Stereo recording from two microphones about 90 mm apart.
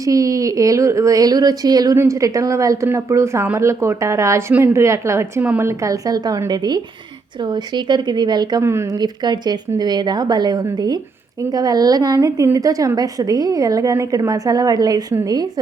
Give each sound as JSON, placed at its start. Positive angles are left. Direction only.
{"t": 0.0, "sound": "a woman's voice", "side_deg": -40}
{"t": 2.0, "sound": "a woman's voice", "side_deg": -35}
{"t": 5.4, "sound": "a woman's voice", "side_deg": -15}
{"t": 5.6, "sound": "a woman's voice", "side_deg": -40}
{"t": 8.6, "sound": "speech", "side_deg": -30}
{"t": 9.0, "sound": "a woman's voice", "side_deg": -50}